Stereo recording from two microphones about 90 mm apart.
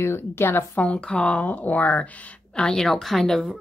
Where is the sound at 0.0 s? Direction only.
25° left (ahead or behind).